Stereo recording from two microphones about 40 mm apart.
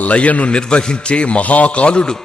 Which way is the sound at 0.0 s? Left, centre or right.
Left.